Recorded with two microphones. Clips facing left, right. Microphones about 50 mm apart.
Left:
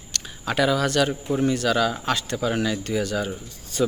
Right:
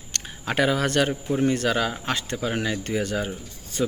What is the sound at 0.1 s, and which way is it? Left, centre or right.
Speech, right.